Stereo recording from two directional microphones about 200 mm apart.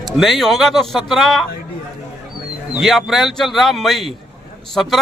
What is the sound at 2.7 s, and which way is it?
A man's voice, centre (ahead or behind).